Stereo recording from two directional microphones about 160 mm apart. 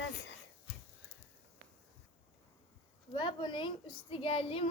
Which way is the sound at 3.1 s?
30° left (ahead or behind).